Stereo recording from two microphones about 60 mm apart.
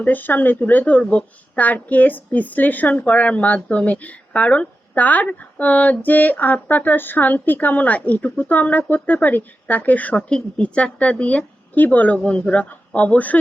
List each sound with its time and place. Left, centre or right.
0.0 s speech: left
10.2 s speech: centre